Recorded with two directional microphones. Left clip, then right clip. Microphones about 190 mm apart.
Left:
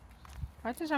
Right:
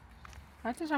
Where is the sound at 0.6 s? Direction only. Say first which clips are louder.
Even; 25° right (ahead or behind).